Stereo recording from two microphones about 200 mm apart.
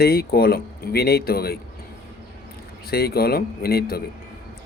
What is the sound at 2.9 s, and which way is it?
A man's voice, 50° left (ahead or behind).